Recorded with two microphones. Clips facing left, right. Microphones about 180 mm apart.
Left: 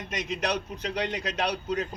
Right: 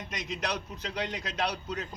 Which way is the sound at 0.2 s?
65° left (ahead or behind).